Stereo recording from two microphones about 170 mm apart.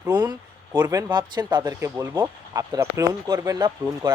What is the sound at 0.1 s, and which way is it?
Speech, 25° right (ahead or behind).